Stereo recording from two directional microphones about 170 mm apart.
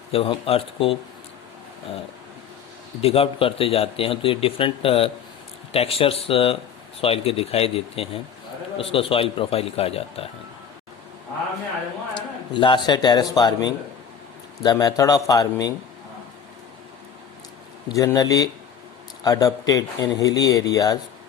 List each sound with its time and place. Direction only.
0.1 s speech: 35° left (ahead or behind)
3.0 s speech: 35° left (ahead or behind)
12.1 s a man's voice: 30° left (ahead or behind)
14.6 s speech: 25° left (ahead or behind)
17.8 s speech: 20° left (ahead or behind)